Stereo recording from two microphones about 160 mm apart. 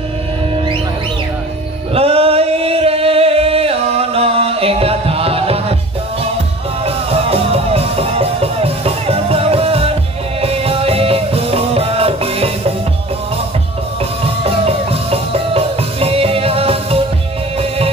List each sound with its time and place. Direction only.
2.0 s music: 40° right (ahead or behind)
7.1 s music: 40° right (ahead or behind)
14.4 s music: 40° right (ahead or behind)